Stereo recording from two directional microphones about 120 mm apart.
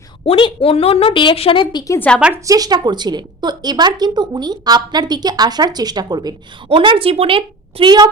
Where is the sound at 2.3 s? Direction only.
30° right (ahead or behind).